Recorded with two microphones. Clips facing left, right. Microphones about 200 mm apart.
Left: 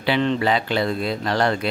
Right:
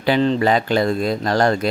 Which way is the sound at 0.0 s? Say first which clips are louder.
Right 4 dB; 40° right (ahead or behind).